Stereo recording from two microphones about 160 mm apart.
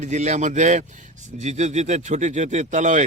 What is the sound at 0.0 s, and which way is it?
A man's voice, 45° right (ahead or behind).